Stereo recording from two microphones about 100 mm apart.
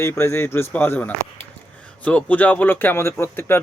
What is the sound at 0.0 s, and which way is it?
Speech, 25° left (ahead or behind).